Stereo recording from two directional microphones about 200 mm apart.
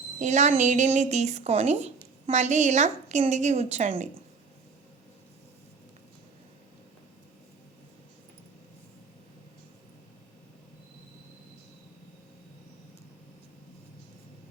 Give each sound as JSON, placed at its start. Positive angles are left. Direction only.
{"t": 0.2, "sound": "a woman's voice", "side_deg": -35}